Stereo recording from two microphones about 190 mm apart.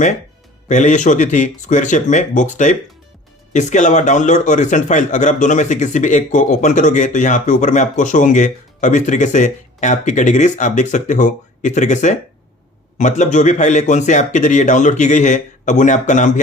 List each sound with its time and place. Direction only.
0.7 s a man's voice: 40° left (ahead or behind)